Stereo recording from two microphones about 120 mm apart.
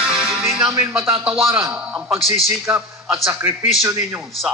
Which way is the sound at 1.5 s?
15° right (ahead or behind).